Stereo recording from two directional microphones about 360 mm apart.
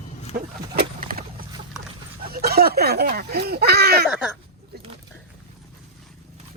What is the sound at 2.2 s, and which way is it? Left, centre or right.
Speech, right.